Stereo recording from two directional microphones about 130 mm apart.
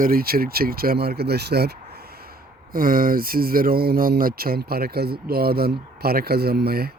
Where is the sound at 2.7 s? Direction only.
90° right.